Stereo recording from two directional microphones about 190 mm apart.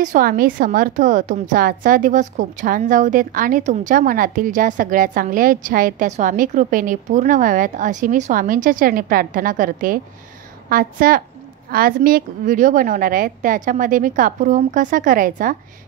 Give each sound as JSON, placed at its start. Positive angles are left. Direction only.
{"t": 0.0, "sound": "a woman's voice", "side_deg": -45}